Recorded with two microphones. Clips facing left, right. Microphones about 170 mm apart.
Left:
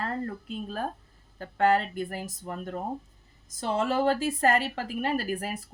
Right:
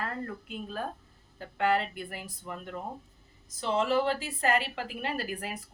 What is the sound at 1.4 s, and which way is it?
Speech, 45° left (ahead or behind).